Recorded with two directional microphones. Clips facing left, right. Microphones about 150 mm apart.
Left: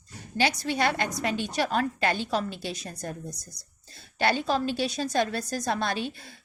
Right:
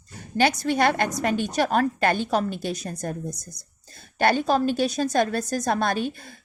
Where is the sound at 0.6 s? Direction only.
50° right (ahead or behind).